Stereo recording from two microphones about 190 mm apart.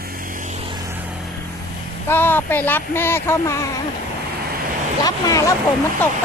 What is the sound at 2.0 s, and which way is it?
Speech, 10° left (ahead or behind).